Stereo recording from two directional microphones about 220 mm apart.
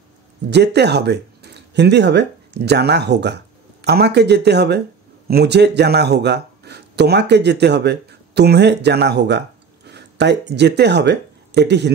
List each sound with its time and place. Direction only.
0.5 s speech: 50° right (ahead or behind)